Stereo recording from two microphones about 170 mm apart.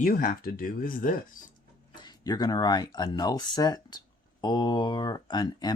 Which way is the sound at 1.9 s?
25° left (ahead or behind).